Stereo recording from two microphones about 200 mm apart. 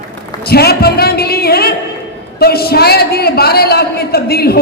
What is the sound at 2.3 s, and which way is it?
A woman's voice, 50° left (ahead or behind).